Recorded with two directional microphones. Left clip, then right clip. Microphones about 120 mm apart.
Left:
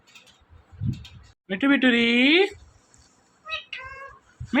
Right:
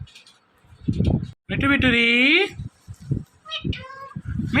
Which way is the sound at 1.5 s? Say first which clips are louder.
Right 1 dB; 15° left (ahead or behind).